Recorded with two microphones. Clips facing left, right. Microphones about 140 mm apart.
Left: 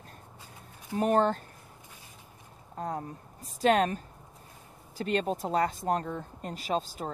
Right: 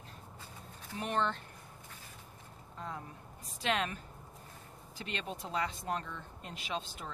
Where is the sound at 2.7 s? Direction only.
45° left (ahead or behind).